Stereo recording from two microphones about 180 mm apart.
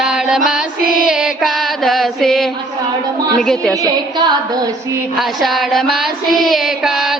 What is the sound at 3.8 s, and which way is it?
Female singing, 25° right (ahead or behind).